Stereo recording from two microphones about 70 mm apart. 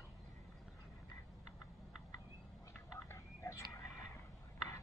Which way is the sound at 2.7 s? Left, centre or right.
Left.